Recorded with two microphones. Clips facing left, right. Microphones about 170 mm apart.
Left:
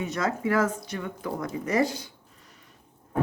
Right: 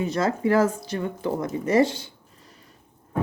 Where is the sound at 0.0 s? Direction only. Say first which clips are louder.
Right 4 dB; 30° right (ahead or behind).